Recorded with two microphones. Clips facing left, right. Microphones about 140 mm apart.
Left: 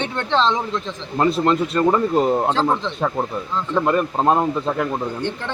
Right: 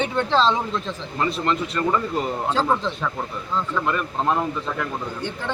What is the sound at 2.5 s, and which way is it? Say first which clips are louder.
Speech: left 1 dB; 5° right (ahead or behind).